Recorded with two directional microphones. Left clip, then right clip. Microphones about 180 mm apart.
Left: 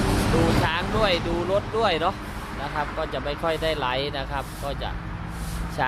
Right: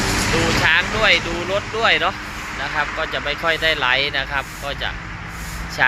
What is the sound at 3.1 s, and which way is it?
Speech, 20° left (ahead or behind).